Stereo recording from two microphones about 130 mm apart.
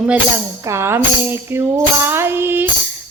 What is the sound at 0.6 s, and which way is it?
Tambourine, 20° right (ahead or behind).